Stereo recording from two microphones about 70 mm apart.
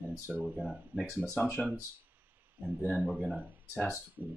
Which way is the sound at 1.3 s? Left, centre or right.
Centre.